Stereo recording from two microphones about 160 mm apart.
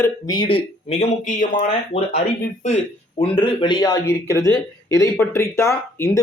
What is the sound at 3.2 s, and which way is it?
Speech, 30° left (ahead or behind).